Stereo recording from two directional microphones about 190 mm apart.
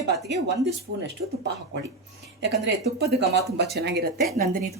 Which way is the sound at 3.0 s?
60° right (ahead or behind).